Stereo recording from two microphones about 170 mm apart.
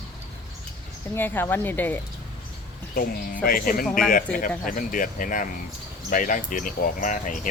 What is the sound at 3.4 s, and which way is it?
Speech, 55° left (ahead or behind).